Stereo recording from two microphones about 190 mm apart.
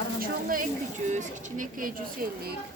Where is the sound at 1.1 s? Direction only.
40° right (ahead or behind).